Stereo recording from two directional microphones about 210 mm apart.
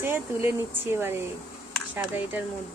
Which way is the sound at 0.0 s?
10° right (ahead or behind).